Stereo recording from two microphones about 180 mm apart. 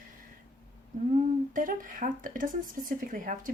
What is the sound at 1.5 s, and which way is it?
Speech, 50° right (ahead or behind).